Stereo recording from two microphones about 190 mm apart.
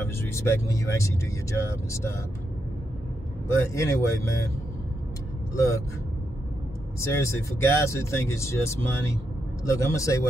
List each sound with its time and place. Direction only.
0.0 s speech: 15° left (ahead or behind)
3.4 s speech: 15° left (ahead or behind)
5.5 s speech: 15° left (ahead or behind)
7.0 s speech: 15° left (ahead or behind)